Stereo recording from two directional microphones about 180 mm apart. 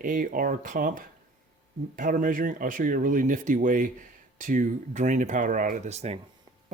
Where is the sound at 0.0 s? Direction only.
50° right (ahead or behind).